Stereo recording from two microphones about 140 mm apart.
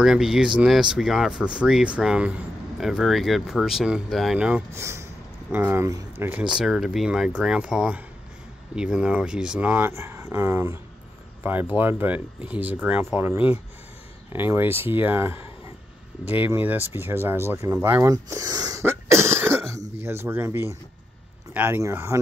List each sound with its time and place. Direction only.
0.0 s speech: 5° right (ahead or behind)
6.5 s speech: 5° right (ahead or behind); by 22.2 s 20° right (ahead or behind)